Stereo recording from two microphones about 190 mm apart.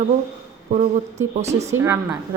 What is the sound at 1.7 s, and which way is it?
Speech, 15° right (ahead or behind).